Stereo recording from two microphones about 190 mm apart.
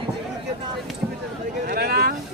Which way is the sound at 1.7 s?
55° right (ahead or behind).